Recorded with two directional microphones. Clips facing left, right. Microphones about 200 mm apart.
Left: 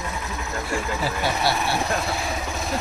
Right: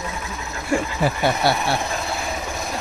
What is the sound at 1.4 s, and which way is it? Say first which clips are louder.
Speech: right 3 dB; 55° right (ahead or behind).